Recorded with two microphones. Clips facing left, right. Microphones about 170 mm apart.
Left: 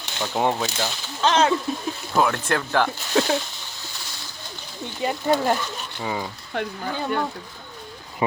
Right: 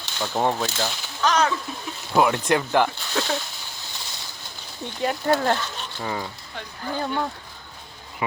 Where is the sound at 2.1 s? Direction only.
10° right (ahead or behind).